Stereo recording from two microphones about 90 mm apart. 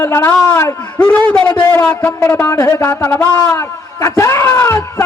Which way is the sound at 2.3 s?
35° left (ahead or behind).